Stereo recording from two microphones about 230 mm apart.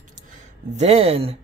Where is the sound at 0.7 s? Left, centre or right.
Right.